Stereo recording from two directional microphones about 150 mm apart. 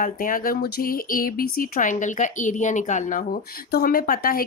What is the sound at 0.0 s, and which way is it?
Speech, 70° left (ahead or behind).